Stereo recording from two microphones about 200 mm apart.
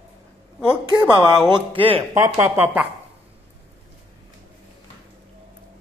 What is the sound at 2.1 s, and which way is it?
Speech, 10° right (ahead or behind).